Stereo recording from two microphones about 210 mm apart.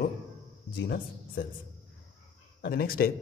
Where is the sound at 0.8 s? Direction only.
50° left (ahead or behind).